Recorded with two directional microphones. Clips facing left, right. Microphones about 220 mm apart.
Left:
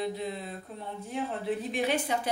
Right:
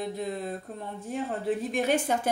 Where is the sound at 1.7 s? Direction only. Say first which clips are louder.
Right 3 dB; 50° right (ahead or behind).